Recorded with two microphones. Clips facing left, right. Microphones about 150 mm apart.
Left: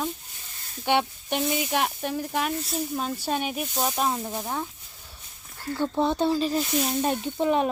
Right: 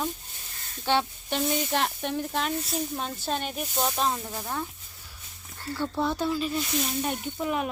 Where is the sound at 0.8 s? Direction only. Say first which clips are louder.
Left 2 dB; 15° left (ahead or behind).